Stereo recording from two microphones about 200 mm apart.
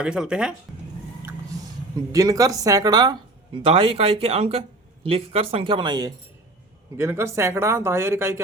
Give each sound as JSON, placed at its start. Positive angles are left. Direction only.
{"t": 0.0, "sound": "speech", "side_deg": -5}
{"t": 1.2, "sound": "a sound", "side_deg": -10}
{"t": 2.1, "sound": "speech", "side_deg": -15}